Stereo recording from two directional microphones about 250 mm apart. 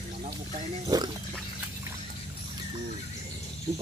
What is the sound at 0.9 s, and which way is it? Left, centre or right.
Speech, centre.